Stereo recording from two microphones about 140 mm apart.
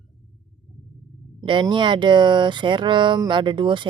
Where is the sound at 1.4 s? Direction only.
30° right (ahead or behind).